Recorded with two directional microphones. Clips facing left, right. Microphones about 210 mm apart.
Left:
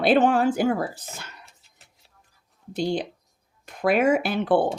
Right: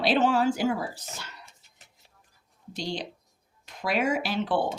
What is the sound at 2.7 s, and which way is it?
Speech, 55° left (ahead or behind).